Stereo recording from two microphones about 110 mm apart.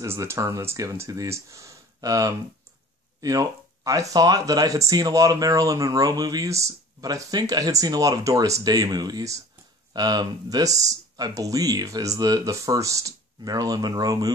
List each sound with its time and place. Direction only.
0.0 s speech: 25° right (ahead or behind)